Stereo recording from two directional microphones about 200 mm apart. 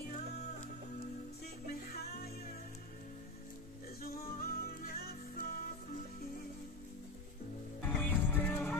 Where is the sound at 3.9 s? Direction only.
50° left (ahead or behind).